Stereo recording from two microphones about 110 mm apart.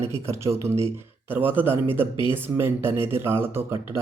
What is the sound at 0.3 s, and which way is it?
Speech, 25° right (ahead or behind).